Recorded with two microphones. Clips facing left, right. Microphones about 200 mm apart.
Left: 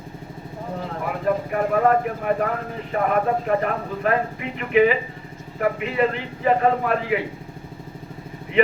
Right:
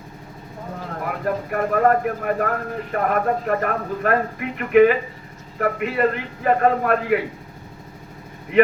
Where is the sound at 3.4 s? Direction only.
50° right (ahead or behind).